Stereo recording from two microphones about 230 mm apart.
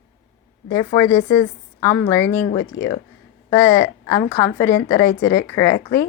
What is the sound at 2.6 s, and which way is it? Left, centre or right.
Speech, left.